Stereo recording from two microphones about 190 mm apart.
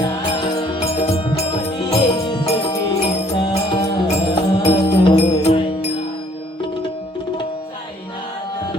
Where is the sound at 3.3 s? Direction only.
25° left (ahead or behind).